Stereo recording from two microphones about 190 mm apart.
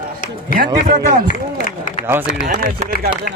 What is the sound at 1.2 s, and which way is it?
Speech, 45° left (ahead or behind).